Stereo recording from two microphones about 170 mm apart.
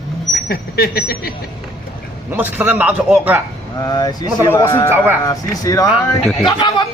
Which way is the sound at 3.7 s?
20° left (ahead or behind).